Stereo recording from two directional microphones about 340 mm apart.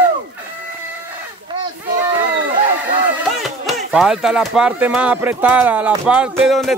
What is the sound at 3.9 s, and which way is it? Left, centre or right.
Speech, centre.